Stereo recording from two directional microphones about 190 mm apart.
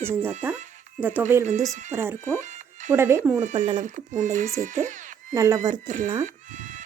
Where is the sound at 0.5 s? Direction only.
40° right (ahead or behind).